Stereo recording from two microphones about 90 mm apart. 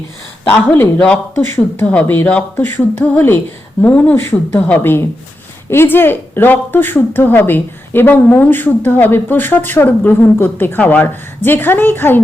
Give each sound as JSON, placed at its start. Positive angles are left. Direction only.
{"t": 0.5, "sound": "speech", "side_deg": 20}
{"t": 1.4, "sound": "a woman's voice", "side_deg": 25}